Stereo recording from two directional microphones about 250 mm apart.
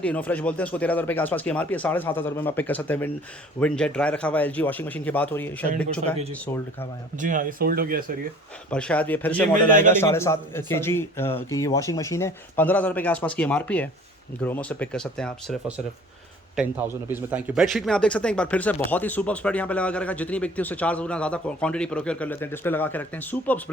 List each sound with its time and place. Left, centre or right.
0.0 s speech: centre
7.2 s speech: right
8.7 s speech: centre